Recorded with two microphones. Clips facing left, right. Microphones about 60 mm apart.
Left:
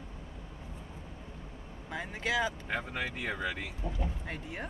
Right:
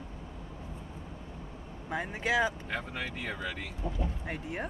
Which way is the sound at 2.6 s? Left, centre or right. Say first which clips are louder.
Left 1 dB; centre.